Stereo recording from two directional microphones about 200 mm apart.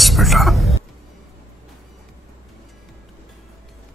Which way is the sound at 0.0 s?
Centre (ahead or behind).